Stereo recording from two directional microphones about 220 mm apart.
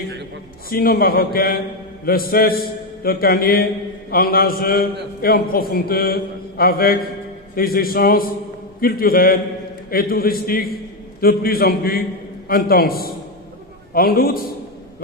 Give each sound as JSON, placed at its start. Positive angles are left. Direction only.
{"t": 0.7, "sound": "a man's voice", "side_deg": 45}
{"t": 4.1, "sound": "mantra", "side_deg": 40}
{"t": 5.2, "sound": "a man's voice", "side_deg": 40}
{"t": 7.5, "sound": "mantra", "side_deg": 40}
{"t": 9.8, "sound": "a man's voice", "side_deg": 40}